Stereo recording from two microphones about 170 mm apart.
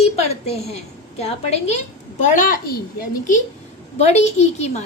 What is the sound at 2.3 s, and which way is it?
A woman's voice, 50° left (ahead or behind).